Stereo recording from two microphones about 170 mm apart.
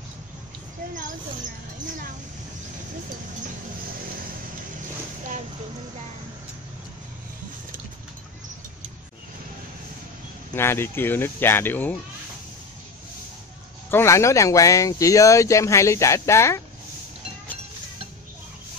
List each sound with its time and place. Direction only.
10.5 s speech: 15° left (ahead or behind)
13.8 s speech: 15° left (ahead or behind)